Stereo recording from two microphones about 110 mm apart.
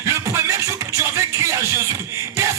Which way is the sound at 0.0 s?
25° right (ahead or behind).